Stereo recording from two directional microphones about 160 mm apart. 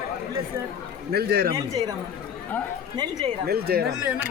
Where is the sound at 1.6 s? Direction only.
25° right (ahead or behind).